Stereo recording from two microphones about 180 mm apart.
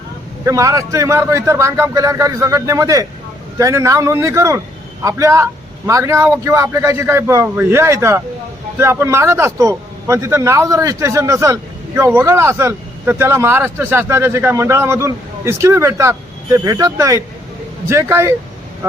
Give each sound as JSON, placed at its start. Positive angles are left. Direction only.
{"t": 0.4, "sound": "a man's voice", "side_deg": -15}